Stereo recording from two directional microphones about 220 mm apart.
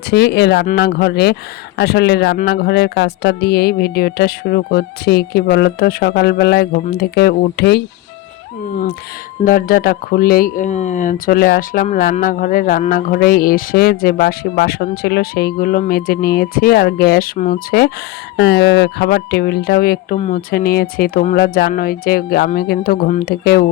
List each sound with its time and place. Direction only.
0.1 s speech: 50° left (ahead or behind)
9.4 s speech: 40° left (ahead or behind)